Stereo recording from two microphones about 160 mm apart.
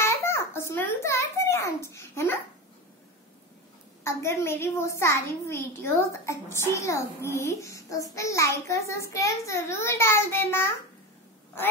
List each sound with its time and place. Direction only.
0.0 s babbling: 15° left (ahead or behind)
4.0 s a child's voice: 15° left (ahead or behind)